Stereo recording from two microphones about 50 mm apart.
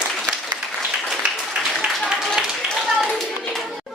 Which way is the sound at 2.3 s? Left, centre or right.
Centre.